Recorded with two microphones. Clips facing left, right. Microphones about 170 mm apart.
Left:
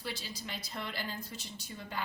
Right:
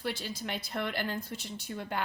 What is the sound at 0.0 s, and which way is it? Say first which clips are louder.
A woman's voice: right 6 dB; 55° right (ahead or behind).